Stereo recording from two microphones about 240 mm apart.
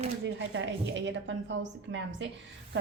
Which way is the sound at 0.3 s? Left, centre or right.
Right.